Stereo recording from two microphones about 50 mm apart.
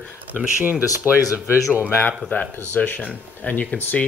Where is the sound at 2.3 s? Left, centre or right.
Left.